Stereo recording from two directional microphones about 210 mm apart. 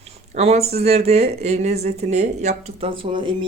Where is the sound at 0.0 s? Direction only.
30° right (ahead or behind).